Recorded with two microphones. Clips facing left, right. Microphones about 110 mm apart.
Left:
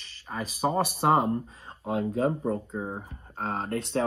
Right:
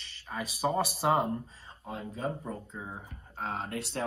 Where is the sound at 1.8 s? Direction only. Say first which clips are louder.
Left 10 dB; 65° left (ahead or behind); by 3.7 s 45° left (ahead or behind).